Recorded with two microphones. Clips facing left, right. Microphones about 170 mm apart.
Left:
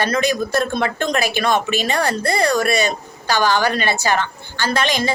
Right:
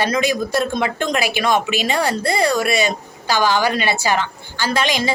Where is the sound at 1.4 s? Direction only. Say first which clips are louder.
Even; 15° right (ahead or behind).